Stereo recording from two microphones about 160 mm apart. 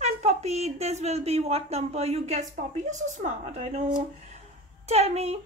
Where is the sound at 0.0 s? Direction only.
40° right (ahead or behind).